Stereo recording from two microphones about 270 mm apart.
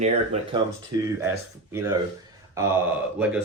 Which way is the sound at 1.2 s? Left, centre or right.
Centre.